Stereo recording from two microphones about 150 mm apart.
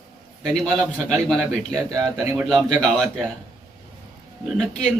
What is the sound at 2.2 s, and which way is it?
Speech, 15° right (ahead or behind).